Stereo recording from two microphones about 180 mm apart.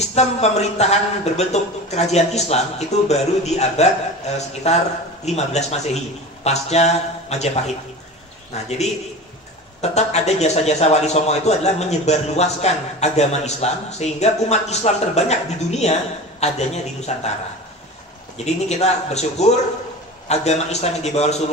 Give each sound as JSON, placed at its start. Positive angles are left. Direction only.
{"t": 0.0, "sound": "a man's voice", "side_deg": 35}
{"t": 9.8, "sound": "a man's voice", "side_deg": 40}
{"t": 18.4, "sound": "a man's voice", "side_deg": 35}